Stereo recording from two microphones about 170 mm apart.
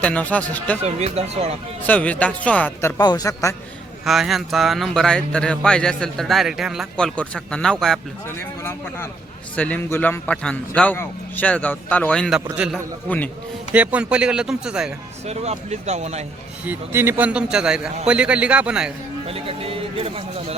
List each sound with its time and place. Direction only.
0.0 s a man's voice: 10° left (ahead or behind)
0.8 s speech: 40° right (ahead or behind)
1.8 s a man's voice: 10° left (ahead or behind)
3.0 s a man's voice: 25° left (ahead or behind)
4.0 s speech: centre (ahead or behind)
8.4 s a man's voice: 15° left (ahead or behind); by 12.8 s 5° right (ahead or behind)
13.1 s a man's voice: 10° left (ahead or behind)
13.7 s speech: 10° right (ahead or behind)
15.3 s speech: 40° right (ahead or behind)
16.6 s a man's voice: 15° right (ahead or behind)
19.3 s speech: 35° right (ahead or behind)